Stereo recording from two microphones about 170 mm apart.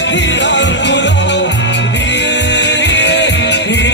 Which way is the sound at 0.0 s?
90° left.